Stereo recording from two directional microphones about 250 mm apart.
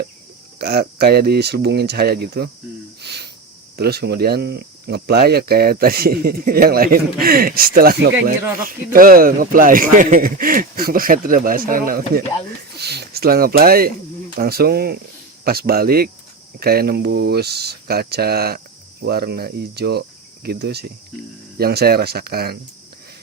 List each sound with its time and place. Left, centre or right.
0.6 s speech: right
3.0 s a sound: right
3.8 s speech: right